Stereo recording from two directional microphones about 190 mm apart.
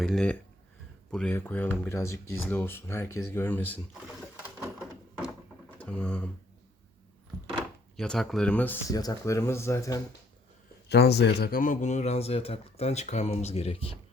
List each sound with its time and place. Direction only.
0.0 s speech: 5° left (ahead or behind)
5.8 s speech: 5° left (ahead or behind)
7.9 s speech: centre (ahead or behind)
10.8 s speech: 60° left (ahead or behind); by 13.9 s 30° left (ahead or behind)